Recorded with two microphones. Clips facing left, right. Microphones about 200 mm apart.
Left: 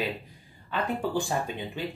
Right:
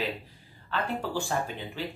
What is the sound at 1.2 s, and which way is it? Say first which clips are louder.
Speech: left 2 dB; 15° left (ahead or behind).